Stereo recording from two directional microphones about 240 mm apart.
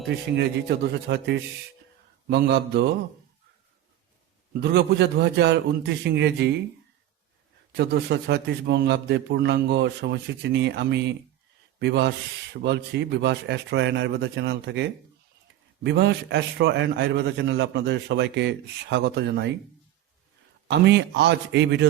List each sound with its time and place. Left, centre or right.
0.3 s a man's voice: right
4.6 s a man's voice: right
7.7 s a man's voice: right
20.7 s a man's voice: right